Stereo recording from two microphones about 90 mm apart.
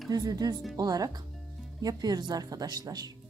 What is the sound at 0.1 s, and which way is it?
Speech, 45° right (ahead or behind).